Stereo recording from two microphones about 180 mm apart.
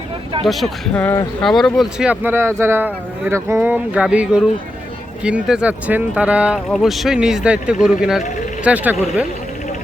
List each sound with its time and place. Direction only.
0.4 s speech: centre (ahead or behind)